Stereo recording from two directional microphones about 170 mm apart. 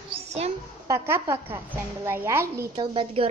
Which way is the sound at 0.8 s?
15° right (ahead or behind).